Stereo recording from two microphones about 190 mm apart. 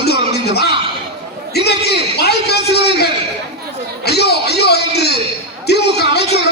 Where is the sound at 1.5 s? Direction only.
60° left (ahead or behind).